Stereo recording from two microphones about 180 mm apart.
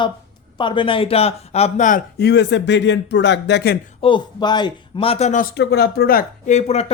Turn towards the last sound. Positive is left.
turn(degrees=35)  # may be behind; listen again after turning